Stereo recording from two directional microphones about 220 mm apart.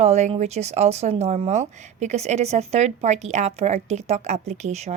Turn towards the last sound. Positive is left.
turn(degrees=-30)  # may be behind; listen again after turning